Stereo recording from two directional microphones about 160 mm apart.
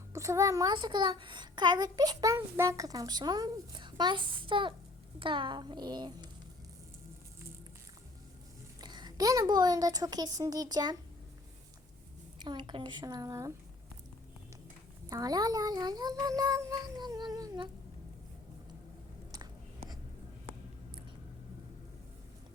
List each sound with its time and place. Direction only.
0.1 s a child's voice: 20° right (ahead or behind)
8.8 s a child's voice: 25° right (ahead or behind)
12.4 s a child's voice: 30° right (ahead or behind)
15.1 s a child's voice: 25° right (ahead or behind)